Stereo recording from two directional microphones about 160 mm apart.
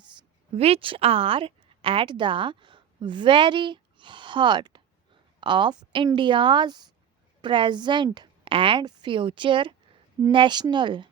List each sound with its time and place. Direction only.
0.5 s a woman's voice: 40° right (ahead or behind)